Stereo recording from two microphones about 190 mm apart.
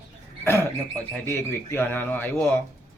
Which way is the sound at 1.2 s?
15° left (ahead or behind).